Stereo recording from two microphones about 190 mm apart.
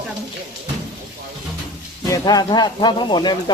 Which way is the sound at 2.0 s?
20° left (ahead or behind).